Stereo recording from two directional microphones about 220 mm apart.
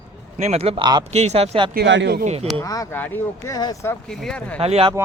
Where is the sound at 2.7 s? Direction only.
10° left (ahead or behind).